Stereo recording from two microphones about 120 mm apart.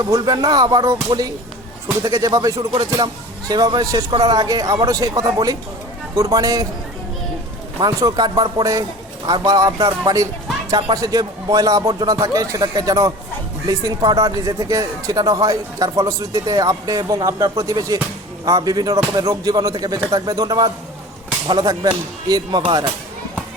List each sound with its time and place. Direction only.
0.0 s a man's voice: 30° right (ahead or behind)
7.8 s a man's voice: 30° right (ahead or behind)